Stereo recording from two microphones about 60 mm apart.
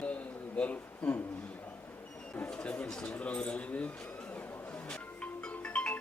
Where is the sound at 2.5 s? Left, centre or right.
Centre.